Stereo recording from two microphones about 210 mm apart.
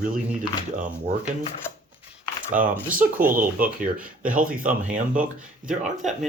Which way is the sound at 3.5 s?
5° right (ahead or behind).